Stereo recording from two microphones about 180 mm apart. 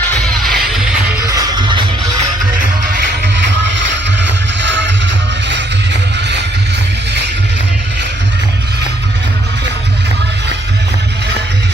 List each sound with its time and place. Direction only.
0.4 s music: centre (ahead or behind)
1.2 s music: 20° right (ahead or behind)
5.5 s music: 75° right (ahead or behind)